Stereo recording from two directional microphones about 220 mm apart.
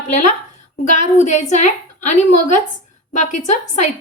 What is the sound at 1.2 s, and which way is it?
A woman's voice, 35° left (ahead or behind).